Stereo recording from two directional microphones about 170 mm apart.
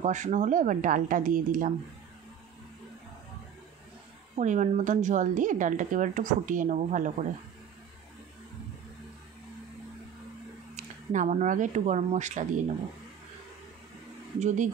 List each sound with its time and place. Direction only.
0.0 s speech: 45° right (ahead or behind)
4.4 s speech: 45° right (ahead or behind)
10.8 s speech: 45° right (ahead or behind)
14.4 s speech: 45° right (ahead or behind)